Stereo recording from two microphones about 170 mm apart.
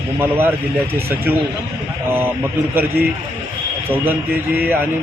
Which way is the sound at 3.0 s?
65° right (ahead or behind).